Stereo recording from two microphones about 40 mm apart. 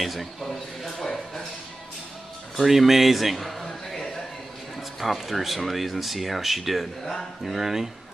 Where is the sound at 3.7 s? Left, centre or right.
Centre.